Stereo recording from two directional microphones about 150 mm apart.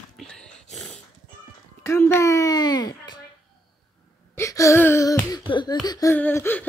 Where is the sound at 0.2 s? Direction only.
5° left (ahead or behind).